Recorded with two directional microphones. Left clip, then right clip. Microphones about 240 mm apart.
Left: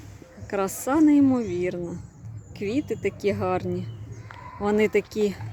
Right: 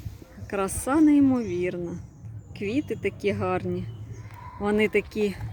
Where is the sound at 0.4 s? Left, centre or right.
Centre.